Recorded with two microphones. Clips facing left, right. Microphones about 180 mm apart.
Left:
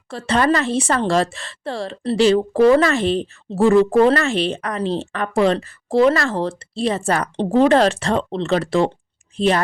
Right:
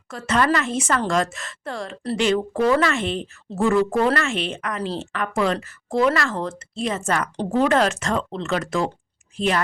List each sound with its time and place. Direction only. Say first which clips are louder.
0.1 s speech: left 3 dB; 30° left (ahead or behind)